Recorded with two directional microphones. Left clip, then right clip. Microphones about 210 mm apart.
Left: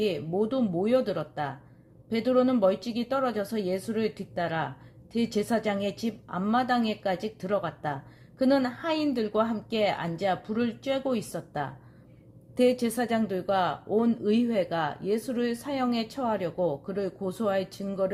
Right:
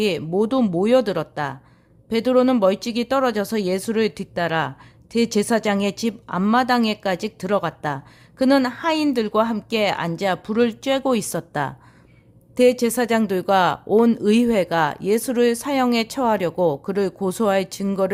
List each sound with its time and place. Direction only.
0.0 s speech: 35° right (ahead or behind)